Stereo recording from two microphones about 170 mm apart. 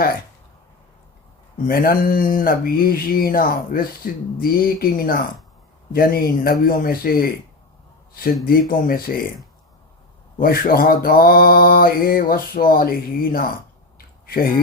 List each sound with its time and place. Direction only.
1.6 s speech: 60° left (ahead or behind)
8.4 s speech: 60° left (ahead or behind)
10.4 s speech: 60° left (ahead or behind)